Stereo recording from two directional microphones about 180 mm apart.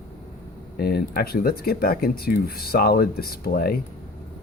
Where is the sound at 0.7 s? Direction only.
60° left (ahead or behind).